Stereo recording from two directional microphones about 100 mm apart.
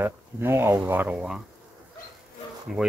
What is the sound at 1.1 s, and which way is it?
Speech, 5° right (ahead or behind).